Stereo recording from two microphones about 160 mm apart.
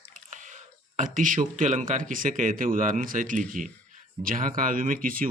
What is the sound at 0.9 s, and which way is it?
Speech, 55° right (ahead or behind).